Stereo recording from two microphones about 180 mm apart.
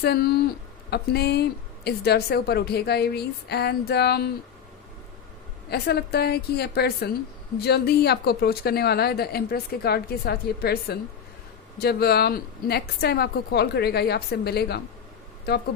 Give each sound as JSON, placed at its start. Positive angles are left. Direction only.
{"t": 0.0, "sound": "speech", "side_deg": 60}
{"t": 5.7, "sound": "speech", "side_deg": 65}